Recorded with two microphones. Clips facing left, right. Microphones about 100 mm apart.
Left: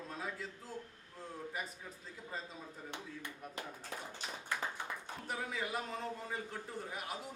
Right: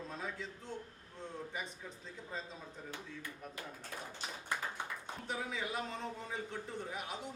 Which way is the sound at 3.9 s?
20° left (ahead or behind).